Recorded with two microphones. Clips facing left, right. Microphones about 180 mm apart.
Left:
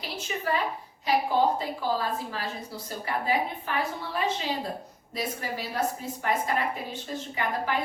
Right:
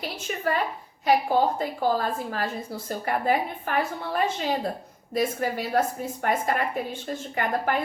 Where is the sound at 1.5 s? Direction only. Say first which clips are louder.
Right 4 dB; 50° right (ahead or behind).